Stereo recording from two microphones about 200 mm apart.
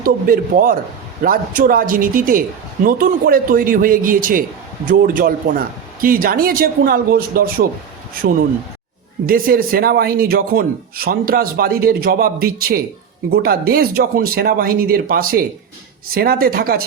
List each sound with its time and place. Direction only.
0.0 s a man's voice: 45° right (ahead or behind)
9.2 s a man's voice: 45° right (ahead or behind)